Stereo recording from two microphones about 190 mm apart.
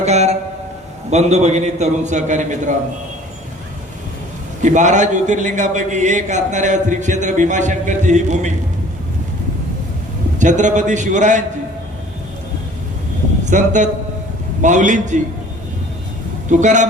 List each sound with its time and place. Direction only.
0.0 s a sound: 35° right (ahead or behind)
1.1 s a man's voice: 35° right (ahead or behind)
4.6 s a man's voice: 40° right (ahead or behind)
10.3 s a man's voice: 40° right (ahead or behind)
13.4 s a man's voice: 40° right (ahead or behind)
16.5 s a man's voice: 40° right (ahead or behind)